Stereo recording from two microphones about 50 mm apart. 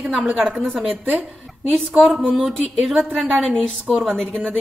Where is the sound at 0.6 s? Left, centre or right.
Centre.